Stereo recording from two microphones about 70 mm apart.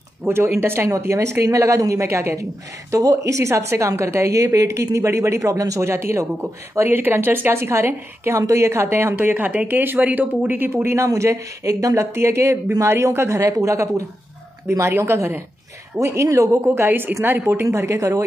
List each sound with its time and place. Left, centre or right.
0.2 s a woman's voice: right
2.9 s a woman's voice: right
5.9 s a woman's voice: right
10.7 s a woman's voice: right
11.1 s a woman's voice: right
16.0 s a woman's voice: right
16.6 s a woman's voice: right